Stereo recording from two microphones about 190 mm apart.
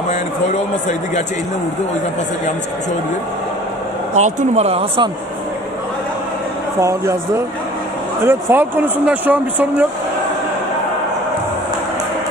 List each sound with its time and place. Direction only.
4.1 s speech: 40° right (ahead or behind)
6.8 s speech: 15° right (ahead or behind)